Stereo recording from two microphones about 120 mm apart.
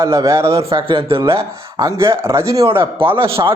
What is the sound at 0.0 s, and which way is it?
Speech, 25° right (ahead or behind).